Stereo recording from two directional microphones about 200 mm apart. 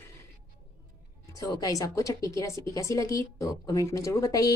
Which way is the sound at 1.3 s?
15° left (ahead or behind).